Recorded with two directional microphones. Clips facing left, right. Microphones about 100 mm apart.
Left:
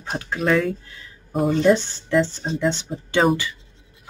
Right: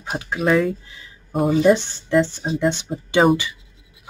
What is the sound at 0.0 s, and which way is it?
Speech, 10° right (ahead or behind).